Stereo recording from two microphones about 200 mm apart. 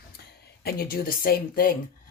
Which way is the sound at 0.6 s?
45° left (ahead or behind).